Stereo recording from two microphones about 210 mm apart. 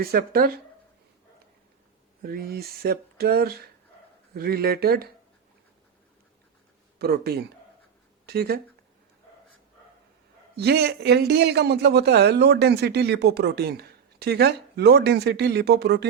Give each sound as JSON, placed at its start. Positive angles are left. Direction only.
{"t": 0.0, "sound": "a man's voice", "side_deg": -45}
{"t": 2.2, "sound": "a man's voice", "side_deg": -45}
{"t": 7.0, "sound": "a man's voice", "side_deg": -50}
{"t": 10.5, "sound": "a man's voice", "side_deg": -50}